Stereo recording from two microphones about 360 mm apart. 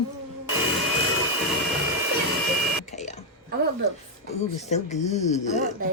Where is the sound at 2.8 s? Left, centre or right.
Centre.